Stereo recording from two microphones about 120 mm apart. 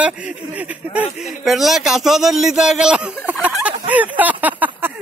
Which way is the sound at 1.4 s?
Centre (ahead or behind).